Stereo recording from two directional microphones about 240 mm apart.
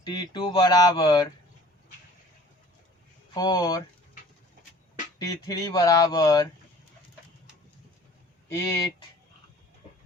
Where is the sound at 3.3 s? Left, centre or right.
Centre.